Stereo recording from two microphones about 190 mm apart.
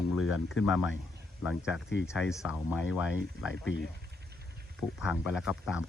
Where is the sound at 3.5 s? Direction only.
80° left.